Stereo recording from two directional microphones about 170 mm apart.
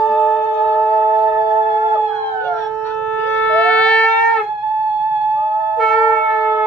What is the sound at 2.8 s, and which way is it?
Shofar, 10° left (ahead or behind).